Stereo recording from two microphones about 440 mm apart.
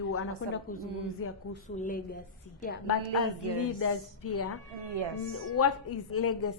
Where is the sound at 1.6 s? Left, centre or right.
Centre.